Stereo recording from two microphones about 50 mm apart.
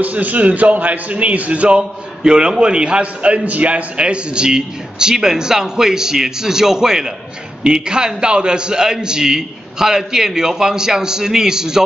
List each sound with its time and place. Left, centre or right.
0.0 s a man's voice: right; by 11.8 s centre